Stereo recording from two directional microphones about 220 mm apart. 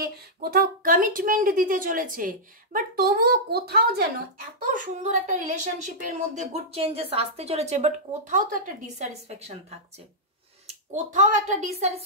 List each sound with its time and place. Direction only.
0.0 s a woman's voice: 45° right (ahead or behind)
4.6 s a woman's voice: 35° right (ahead or behind)